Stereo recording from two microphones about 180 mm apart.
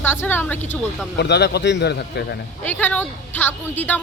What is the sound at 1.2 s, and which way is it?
Speech, 70° left (ahead or behind).